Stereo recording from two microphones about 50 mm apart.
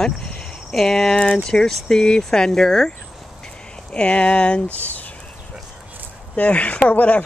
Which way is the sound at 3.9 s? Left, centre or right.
Left.